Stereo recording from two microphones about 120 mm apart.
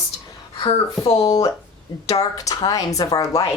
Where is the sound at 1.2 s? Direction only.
30° left (ahead or behind).